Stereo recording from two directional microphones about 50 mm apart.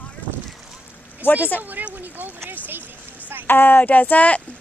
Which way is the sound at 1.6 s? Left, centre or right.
Right.